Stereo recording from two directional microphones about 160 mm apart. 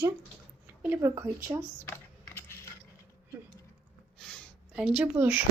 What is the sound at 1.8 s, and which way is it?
Typing, 15° left (ahead or behind).